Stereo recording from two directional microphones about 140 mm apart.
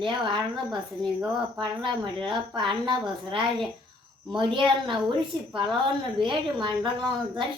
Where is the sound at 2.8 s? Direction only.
35° right (ahead or behind).